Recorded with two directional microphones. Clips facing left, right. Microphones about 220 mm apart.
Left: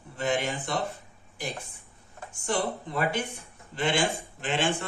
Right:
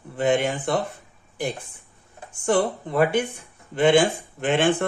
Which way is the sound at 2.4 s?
55° right (ahead or behind).